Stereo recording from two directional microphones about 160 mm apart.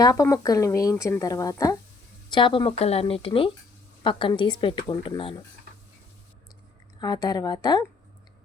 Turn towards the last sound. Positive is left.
turn(degrees=25)  # may be behind; listen again after turning